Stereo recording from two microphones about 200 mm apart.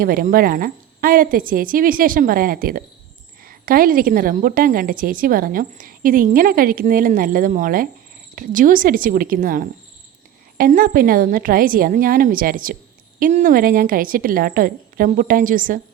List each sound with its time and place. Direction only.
0.0 s a woman's voice: 45° right (ahead or behind)